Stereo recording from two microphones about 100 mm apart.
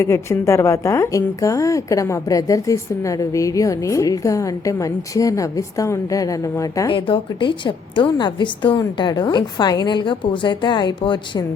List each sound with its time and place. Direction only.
0.0 s a woman's voice: 30° left (ahead or behind)
6.9 s a woman's voice: 55° left (ahead or behind)